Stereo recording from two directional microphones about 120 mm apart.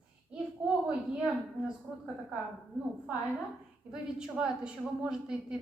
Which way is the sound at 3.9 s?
5° right (ahead or behind).